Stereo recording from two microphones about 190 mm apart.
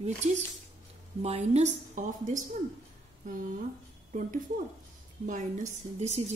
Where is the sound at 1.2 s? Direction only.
35° right (ahead or behind).